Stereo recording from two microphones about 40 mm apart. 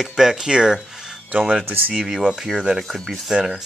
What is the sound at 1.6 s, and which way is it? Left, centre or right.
Speech, right.